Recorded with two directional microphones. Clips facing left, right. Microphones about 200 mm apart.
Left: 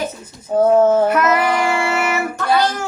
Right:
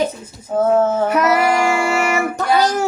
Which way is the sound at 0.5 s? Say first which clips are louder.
Left 2 dB; 15° left (ahead or behind).